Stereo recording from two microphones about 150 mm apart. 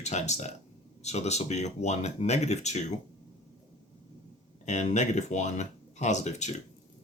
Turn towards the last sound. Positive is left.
turn(degrees=50)  # may be behind; listen again after turning